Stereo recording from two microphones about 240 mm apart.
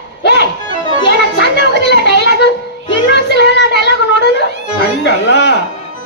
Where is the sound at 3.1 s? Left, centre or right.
Left.